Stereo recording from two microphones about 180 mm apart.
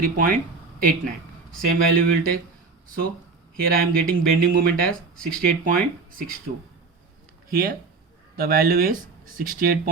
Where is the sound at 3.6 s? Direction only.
55° right (ahead or behind).